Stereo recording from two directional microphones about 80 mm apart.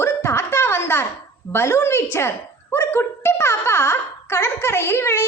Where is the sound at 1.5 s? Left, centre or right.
Left.